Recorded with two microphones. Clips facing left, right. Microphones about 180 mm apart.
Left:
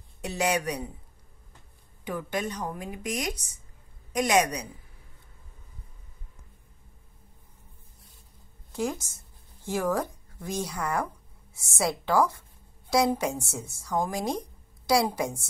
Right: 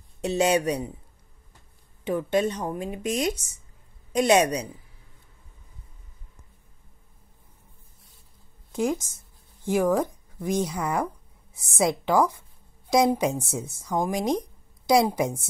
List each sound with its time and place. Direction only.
0.2 s speech: 25° right (ahead or behind)
2.0 s speech: 25° right (ahead or behind)
8.7 s a woman's voice: 15° right (ahead or behind)